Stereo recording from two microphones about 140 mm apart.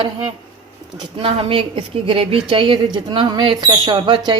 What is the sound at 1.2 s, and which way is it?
Speech, 40° right (ahead or behind).